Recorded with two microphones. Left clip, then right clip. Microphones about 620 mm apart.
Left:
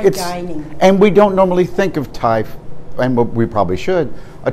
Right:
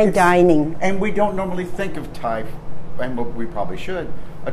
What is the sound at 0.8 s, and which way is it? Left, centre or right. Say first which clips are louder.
A man's voice: left 10 dB; left.